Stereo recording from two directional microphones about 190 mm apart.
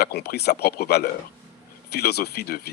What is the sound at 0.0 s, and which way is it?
Speech, 55° left (ahead or behind).